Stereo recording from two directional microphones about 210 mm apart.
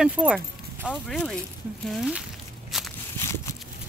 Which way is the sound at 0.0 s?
5° right (ahead or behind).